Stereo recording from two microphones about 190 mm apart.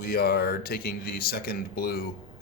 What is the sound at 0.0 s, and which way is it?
Speech, 55° left (ahead or behind).